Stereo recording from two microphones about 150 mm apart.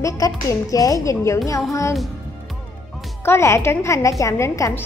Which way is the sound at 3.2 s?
15° left (ahead or behind).